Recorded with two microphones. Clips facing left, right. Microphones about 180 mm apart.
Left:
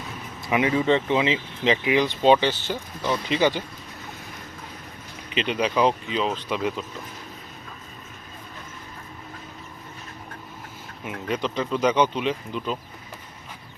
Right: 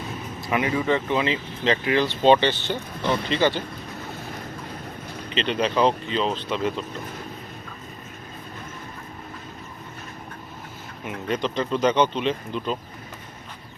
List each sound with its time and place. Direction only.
0.4 s speech: 20° left (ahead or behind)
5.3 s speech: 10° left (ahead or behind)
11.0 s speech: 5° left (ahead or behind)